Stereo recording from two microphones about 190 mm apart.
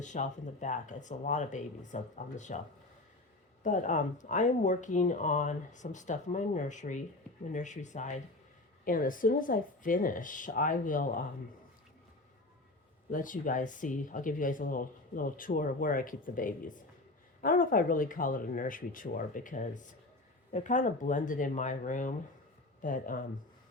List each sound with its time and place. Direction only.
0.0 s speech: 40° left (ahead or behind)
3.6 s speech: 40° left (ahead or behind)
13.1 s speech: 45° left (ahead or behind)